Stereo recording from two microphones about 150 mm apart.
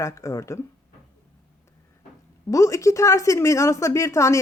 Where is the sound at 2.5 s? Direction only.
20° left (ahead or behind).